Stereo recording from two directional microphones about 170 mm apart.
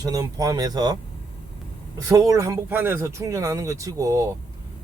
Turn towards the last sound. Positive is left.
turn(degrees=-20)  # may be behind; listen again after turning